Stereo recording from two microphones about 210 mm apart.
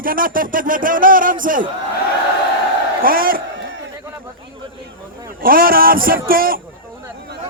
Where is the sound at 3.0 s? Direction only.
45° right (ahead or behind).